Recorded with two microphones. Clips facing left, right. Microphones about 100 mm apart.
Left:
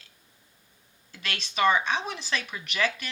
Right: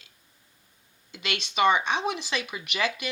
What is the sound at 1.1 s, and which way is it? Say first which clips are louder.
Speech: right 3 dB; 15° right (ahead or behind).